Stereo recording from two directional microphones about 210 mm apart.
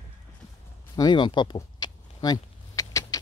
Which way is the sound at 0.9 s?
20° left (ahead or behind).